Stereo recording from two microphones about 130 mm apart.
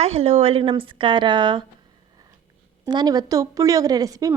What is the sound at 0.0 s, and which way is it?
Speech, 55° right (ahead or behind).